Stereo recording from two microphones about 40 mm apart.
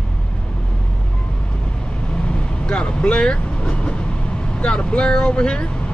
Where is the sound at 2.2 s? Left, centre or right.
Left.